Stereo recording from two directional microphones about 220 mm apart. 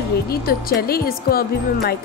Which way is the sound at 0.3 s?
45° left (ahead or behind).